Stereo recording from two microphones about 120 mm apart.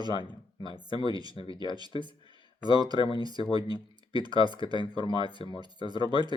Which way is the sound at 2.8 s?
35° right (ahead or behind).